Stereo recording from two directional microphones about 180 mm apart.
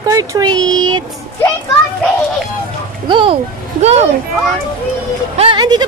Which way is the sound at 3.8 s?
35° right (ahead or behind).